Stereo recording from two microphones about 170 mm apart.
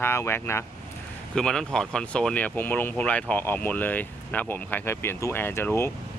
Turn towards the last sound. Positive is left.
turn(degrees=15)  # may be behind; listen again after turning